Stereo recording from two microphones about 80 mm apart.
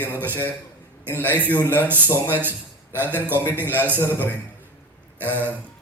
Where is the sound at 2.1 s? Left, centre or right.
Left.